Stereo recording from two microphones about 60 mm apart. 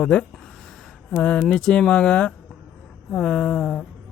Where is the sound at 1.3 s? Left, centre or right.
Centre.